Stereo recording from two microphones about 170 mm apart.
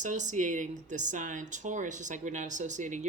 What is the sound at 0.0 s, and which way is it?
Speech, 45° right (ahead or behind).